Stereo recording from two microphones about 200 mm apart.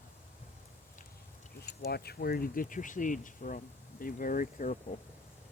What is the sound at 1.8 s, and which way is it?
Speech, 50° left (ahead or behind).